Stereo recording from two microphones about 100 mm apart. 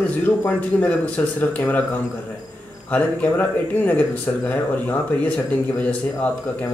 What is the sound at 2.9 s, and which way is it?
Speech, 15° left (ahead or behind).